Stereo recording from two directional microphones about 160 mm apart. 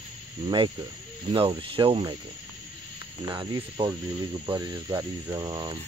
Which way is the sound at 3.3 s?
25° right (ahead or behind).